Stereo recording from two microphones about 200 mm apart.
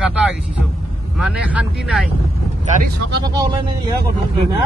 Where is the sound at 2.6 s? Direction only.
40° right (ahead or behind).